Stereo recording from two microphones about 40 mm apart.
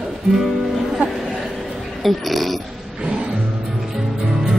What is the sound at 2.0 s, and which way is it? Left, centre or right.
Speech, centre.